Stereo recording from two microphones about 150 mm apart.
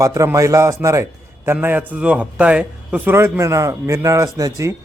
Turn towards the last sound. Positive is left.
turn(degrees=-20)  # may be behind; listen again after turning